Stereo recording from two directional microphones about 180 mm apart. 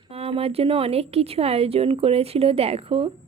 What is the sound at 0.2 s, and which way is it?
A woman's voice, 30° right (ahead or behind).